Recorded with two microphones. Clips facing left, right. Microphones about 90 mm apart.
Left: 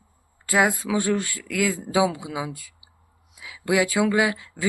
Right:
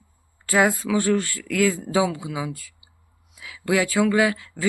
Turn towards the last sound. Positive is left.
turn(degrees=15)  # may be behind; listen again after turning